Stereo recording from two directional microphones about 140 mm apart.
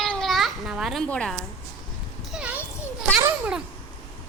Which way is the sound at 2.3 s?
10° right (ahead or behind).